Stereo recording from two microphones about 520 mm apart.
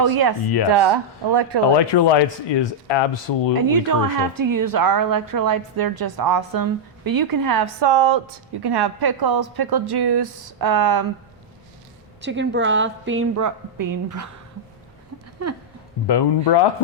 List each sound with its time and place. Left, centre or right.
0.0 s speech: right
1.9 s speech: left
3.6 s a woman's voice: right
12.2 s a woman's voice: right
16.0 s speech: left